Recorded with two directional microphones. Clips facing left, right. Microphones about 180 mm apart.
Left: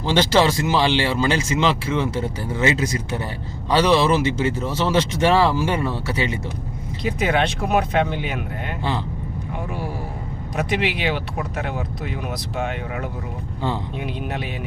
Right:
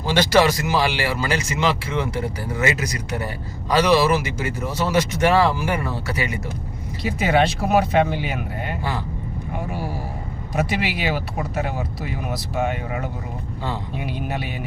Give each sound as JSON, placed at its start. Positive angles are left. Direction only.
{"t": 0.1, "sound": "speech", "side_deg": 25}
{"t": 7.0, "sound": "speech", "side_deg": -5}
{"t": 10.5, "sound": "speech", "side_deg": -5}